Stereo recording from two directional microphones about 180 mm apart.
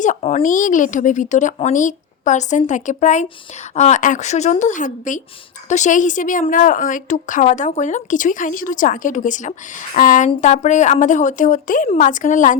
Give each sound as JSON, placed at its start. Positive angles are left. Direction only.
{"t": 0.0, "sound": "a woman's voice", "side_deg": 40}